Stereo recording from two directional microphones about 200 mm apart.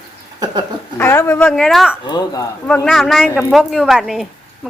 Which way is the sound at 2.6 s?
5° left (ahead or behind).